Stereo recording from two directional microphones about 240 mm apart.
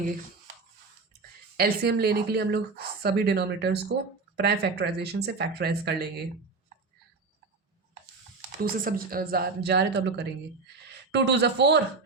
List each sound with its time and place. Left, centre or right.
1.5 s a woman's voice: right
8.6 s a woman's voice: right